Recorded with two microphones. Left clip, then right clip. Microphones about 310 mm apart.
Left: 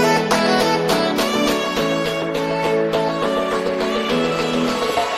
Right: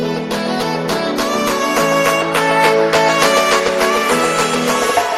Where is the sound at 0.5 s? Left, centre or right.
Centre.